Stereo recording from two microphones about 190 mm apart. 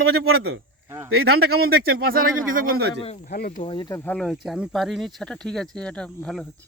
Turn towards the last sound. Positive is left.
turn(degrees=5)  # may be behind; listen again after turning